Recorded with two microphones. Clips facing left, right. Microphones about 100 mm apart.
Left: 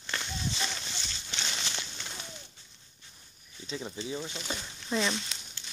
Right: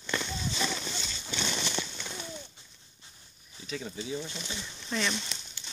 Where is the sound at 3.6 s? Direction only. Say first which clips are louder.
Even; 25° left (ahead or behind).